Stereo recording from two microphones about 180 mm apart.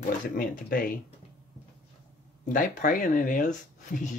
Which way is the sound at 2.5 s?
50° left (ahead or behind).